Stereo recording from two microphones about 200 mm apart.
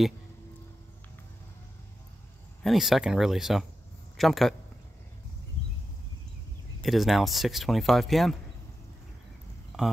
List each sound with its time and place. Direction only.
2.6 s speech: centre (ahead or behind)
6.8 s speech: centre (ahead or behind)
9.7 s speech: centre (ahead or behind)